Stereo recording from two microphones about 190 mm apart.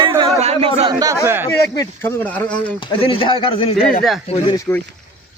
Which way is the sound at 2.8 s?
25° left (ahead or behind).